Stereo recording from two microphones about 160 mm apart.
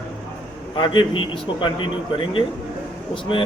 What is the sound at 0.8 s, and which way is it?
Speech, 30° left (ahead or behind).